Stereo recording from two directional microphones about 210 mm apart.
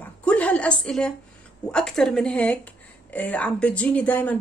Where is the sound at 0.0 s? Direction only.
5° left (ahead or behind).